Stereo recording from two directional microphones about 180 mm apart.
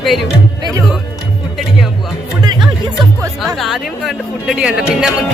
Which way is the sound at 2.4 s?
25° right (ahead or behind).